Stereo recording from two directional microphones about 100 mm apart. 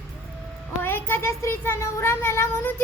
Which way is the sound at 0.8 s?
20° left (ahead or behind).